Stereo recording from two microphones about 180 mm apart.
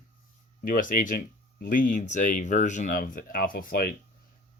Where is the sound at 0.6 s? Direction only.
50° left (ahead or behind).